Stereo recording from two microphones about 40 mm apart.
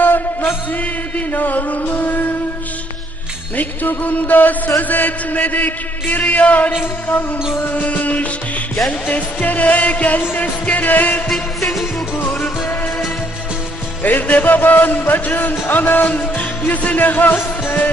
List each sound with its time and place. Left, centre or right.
0.1 s music: left
1.1 s music: left
3.5 s music: left
11.3 s music: centre
14.0 s music: left